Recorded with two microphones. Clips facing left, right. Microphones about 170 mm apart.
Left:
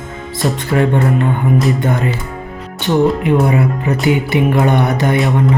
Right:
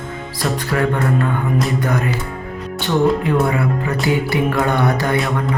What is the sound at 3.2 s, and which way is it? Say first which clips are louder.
Music: left 4 dB; 20° left (ahead or behind).